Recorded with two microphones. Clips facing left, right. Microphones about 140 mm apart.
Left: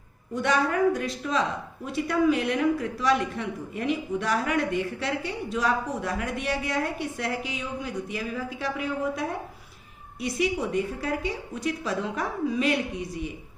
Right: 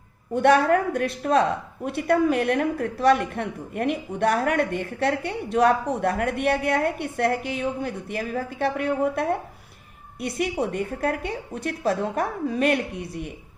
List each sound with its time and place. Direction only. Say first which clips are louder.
0.3 s speech: right 6 dB; 60° right (ahead or behind)